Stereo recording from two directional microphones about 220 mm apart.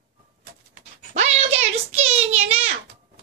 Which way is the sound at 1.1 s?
30° right (ahead or behind).